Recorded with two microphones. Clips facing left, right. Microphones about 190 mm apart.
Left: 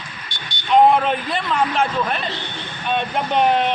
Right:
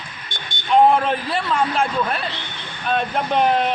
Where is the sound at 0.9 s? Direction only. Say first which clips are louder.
Left 1 dB; centre (ahead or behind).